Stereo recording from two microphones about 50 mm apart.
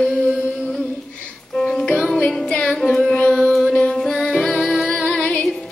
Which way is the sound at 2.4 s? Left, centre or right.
Left.